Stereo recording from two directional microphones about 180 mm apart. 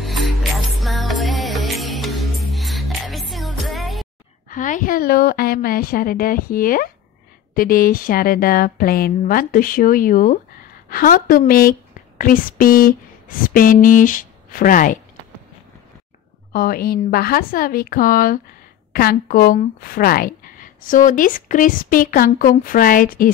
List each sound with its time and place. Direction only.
0.0 s music: centre (ahead or behind)
4.5 s a woman's voice: 45° left (ahead or behind)
16.5 s a woman's voice: 55° left (ahead or behind)